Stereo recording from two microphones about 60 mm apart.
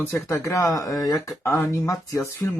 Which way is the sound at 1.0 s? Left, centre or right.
Left.